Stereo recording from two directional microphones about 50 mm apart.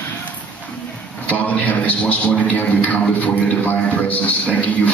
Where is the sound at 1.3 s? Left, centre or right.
Left.